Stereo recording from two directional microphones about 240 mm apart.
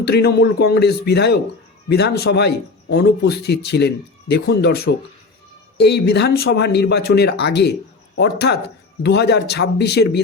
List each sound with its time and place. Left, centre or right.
0.0 s speech: left